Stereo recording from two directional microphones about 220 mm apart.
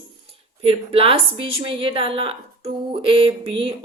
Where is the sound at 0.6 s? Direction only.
25° right (ahead or behind).